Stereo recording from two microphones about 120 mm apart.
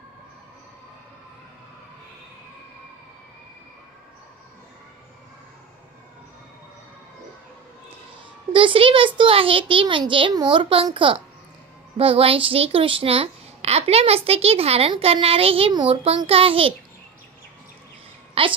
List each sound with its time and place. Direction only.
8.5 s a child's voice: 50° right (ahead or behind)
18.4 s a woman's voice: 50° right (ahead or behind)